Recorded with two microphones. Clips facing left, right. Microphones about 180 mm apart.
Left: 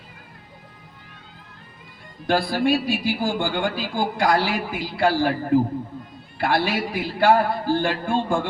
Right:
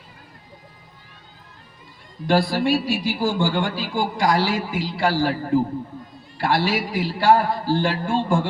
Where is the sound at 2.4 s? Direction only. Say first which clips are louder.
Even; 55° left (ahead or behind).